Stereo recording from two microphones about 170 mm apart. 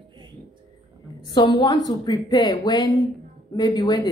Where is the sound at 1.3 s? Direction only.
25° left (ahead or behind).